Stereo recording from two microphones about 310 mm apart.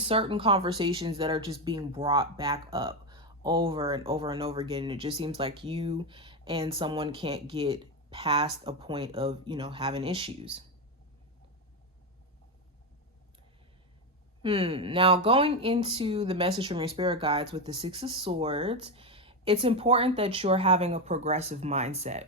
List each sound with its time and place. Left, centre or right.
0.0 s speech: centre
14.4 s speech: centre